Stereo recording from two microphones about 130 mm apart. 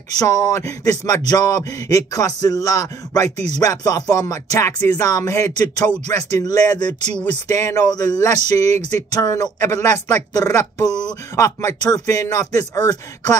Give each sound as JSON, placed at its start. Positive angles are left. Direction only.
{"t": 0.2, "sound": "speech", "side_deg": 25}